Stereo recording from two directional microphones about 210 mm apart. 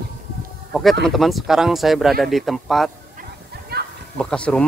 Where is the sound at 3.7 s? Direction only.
50° right (ahead or behind).